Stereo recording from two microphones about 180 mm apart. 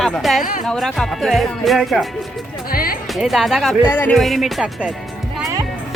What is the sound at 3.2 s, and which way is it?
Speech, centre (ahead or behind).